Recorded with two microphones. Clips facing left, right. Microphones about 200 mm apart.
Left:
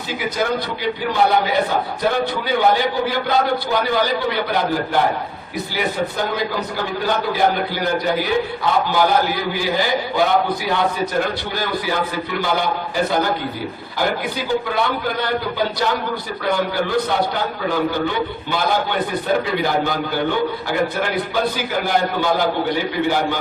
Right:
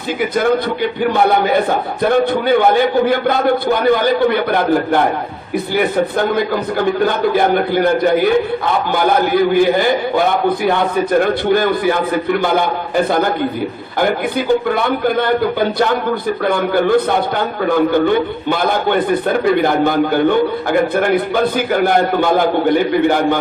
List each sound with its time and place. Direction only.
1.1 s a man's voice: 55° right (ahead or behind)